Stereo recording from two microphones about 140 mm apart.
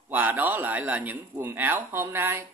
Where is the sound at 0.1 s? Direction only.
15° right (ahead or behind).